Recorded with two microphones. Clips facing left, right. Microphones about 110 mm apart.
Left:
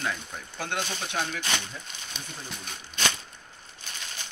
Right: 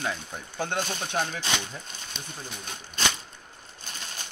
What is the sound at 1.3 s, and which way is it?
Speech, 20° right (ahead or behind).